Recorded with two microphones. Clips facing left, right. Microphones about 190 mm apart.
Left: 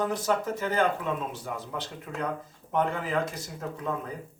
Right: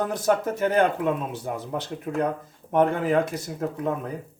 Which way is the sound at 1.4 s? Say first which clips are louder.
Right 5 dB; 45° right (ahead or behind).